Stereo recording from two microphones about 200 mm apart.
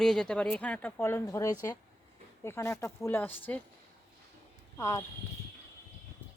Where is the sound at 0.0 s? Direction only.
5° left (ahead or behind).